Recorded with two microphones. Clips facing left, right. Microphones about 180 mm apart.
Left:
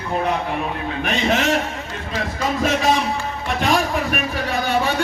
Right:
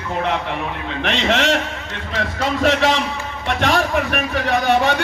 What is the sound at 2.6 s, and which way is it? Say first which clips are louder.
Speech: right 2 dB; 75° right (ahead or behind).